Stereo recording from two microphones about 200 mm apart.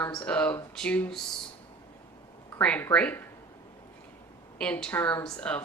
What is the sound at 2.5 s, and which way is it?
Speech, 10° left (ahead or behind).